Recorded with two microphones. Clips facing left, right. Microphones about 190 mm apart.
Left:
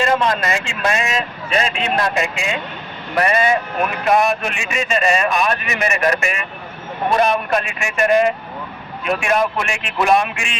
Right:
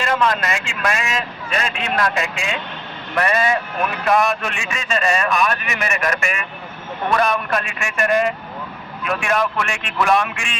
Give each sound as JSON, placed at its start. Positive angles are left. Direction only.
{"t": 0.1, "sound": "speech", "side_deg": 30}
{"t": 5.3, "sound": "speech", "side_deg": 35}